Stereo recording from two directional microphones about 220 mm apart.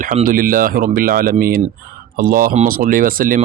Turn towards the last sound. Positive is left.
turn(degrees=-40)  # may be behind; listen again after turning